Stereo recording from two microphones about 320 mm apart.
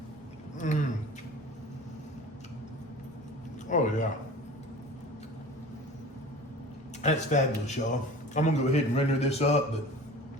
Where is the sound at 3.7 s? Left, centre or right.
Left.